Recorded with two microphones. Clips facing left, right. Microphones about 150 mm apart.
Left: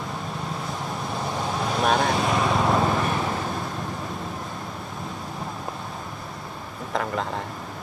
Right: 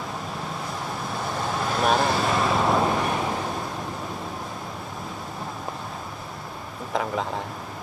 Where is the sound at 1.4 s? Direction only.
Centre (ahead or behind).